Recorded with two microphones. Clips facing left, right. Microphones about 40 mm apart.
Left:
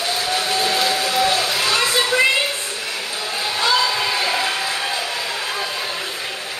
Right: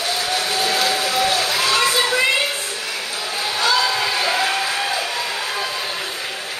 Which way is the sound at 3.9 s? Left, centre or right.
Centre.